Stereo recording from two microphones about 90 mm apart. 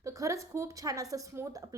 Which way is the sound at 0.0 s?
35° right (ahead or behind).